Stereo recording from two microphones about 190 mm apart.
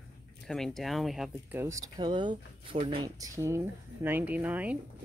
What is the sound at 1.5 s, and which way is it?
Speech, 15° right (ahead or behind).